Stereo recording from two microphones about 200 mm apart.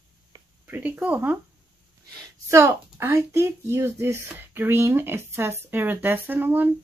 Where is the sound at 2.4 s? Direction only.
15° right (ahead or behind).